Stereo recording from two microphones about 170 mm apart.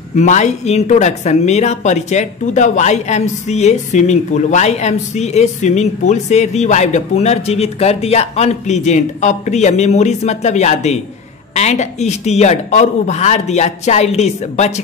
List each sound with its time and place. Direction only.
0.1 s a woman's voice: 45° left (ahead or behind)